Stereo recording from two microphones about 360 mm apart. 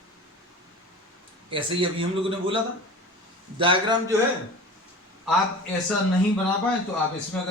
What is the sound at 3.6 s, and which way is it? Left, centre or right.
Speech, centre.